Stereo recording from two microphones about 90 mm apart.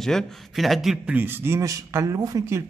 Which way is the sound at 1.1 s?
20° right (ahead or behind).